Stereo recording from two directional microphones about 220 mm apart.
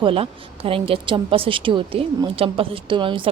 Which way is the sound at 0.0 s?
25° right (ahead or behind).